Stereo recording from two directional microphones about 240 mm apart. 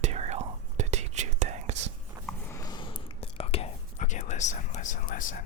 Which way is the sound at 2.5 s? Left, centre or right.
Centre.